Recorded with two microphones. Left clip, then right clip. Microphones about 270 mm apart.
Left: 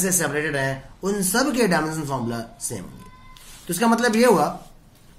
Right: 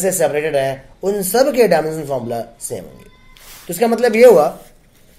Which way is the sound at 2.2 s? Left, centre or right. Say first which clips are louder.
Right 7 dB; centre.